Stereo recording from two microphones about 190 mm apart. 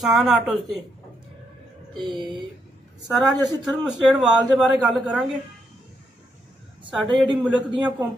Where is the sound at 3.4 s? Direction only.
5° right (ahead or behind).